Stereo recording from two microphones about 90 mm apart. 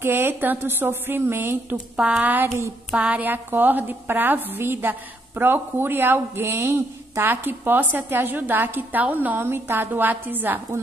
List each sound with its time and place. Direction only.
0.0 s a woman's voice: 25° right (ahead or behind)
2.0 s a woman's voice: 15° right (ahead or behind)